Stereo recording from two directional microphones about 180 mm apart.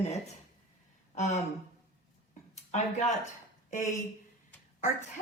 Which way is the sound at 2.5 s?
40° left (ahead or behind).